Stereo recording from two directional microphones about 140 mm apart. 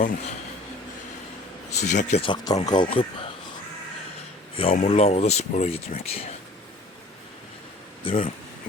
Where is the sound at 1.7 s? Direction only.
60° left (ahead or behind).